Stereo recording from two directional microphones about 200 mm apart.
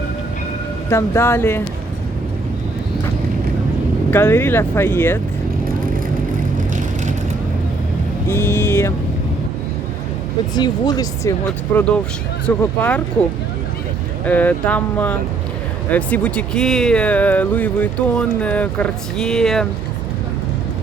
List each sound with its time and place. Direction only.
0.9 s speech: 15° left (ahead or behind)
4.1 s speech: 10° left (ahead or behind)
8.3 s speech: 10° left (ahead or behind)
10.5 s speech: 20° left (ahead or behind)
14.3 s speech: 10° left (ahead or behind)